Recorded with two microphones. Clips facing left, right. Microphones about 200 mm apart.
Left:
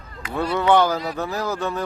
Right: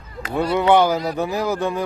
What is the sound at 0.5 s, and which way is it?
Speech, 15° right (ahead or behind).